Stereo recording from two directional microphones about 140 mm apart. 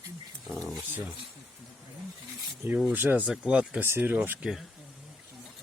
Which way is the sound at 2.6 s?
10° right (ahead or behind).